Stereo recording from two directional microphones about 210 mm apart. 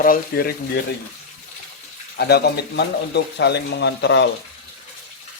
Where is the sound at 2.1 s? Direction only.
50° left (ahead or behind).